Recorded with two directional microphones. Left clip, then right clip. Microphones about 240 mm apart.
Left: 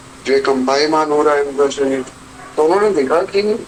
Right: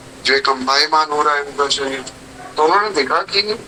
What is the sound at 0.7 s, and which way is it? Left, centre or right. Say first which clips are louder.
Speech: left 1 dB; right.